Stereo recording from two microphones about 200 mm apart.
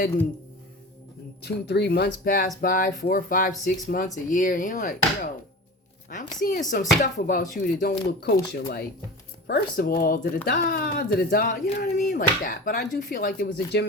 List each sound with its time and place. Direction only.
1.4 s speech: 55° left (ahead or behind)
3.6 s chopping: 45° left (ahead or behind)
6.1 s speech: 40° left (ahead or behind)
9.5 s speech: 45° left (ahead or behind)